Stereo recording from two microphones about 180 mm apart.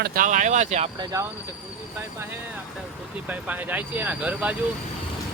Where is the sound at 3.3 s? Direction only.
10° right (ahead or behind).